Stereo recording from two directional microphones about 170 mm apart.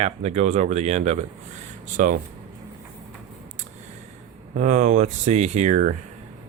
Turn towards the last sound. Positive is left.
turn(degrees=-45)  # may be behind; listen again after turning